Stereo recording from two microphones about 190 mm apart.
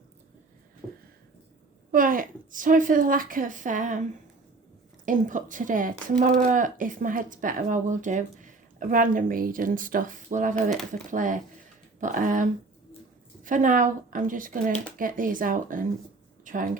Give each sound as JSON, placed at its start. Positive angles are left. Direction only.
{"t": 1.9, "sound": "a woman's voice", "side_deg": -45}
{"t": 5.0, "sound": "speech", "side_deg": -45}
{"t": 10.5, "sound": "speech", "side_deg": 0}
{"t": 11.1, "sound": "speech", "side_deg": -45}
{"t": 16.4, "sound": "a sound", "side_deg": -45}